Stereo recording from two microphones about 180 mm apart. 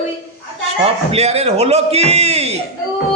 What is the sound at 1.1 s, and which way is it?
A man's voice, 35° right (ahead or behind).